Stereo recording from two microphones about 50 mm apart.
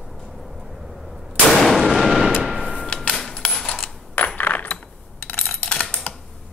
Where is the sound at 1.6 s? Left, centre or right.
Centre.